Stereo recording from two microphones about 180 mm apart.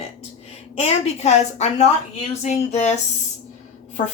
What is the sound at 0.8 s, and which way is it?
Speech, 40° left (ahead or behind).